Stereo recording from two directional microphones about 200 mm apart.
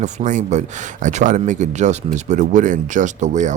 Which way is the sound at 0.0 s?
35° right (ahead or behind).